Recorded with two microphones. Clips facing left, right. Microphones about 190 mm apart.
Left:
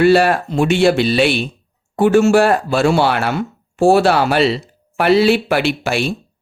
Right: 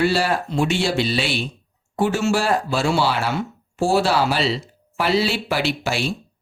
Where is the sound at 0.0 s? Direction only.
60° left (ahead or behind).